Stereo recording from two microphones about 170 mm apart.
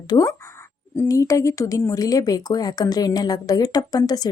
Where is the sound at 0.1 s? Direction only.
20° left (ahead or behind).